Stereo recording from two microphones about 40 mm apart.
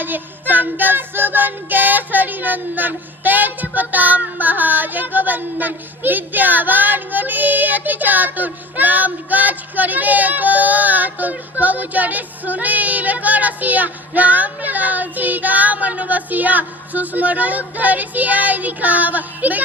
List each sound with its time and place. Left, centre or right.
0.0 s music: right